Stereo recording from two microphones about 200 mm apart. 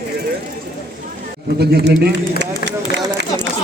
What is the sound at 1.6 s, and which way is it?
A man's voice, 55° right (ahead or behind).